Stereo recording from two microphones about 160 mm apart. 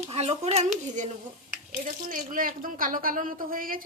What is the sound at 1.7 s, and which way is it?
Speech, 60° right (ahead or behind).